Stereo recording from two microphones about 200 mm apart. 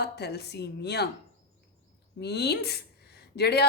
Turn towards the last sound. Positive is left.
turn(degrees=55)  # may be behind; listen again after turning